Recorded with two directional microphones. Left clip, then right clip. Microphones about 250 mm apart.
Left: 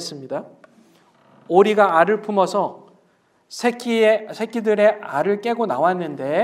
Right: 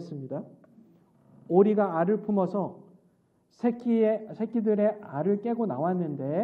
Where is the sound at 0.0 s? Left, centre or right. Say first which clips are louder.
Left 9 dB; centre.